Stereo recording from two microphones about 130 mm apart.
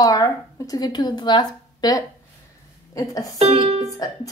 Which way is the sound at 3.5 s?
35° right (ahead or behind).